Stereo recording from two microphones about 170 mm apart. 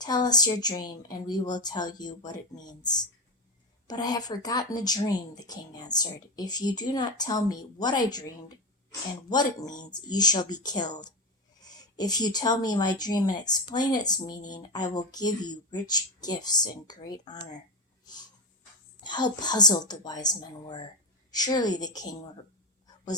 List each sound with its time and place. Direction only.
0.0 s speech: 25° left (ahead or behind)
19.0 s speech: 25° left (ahead or behind)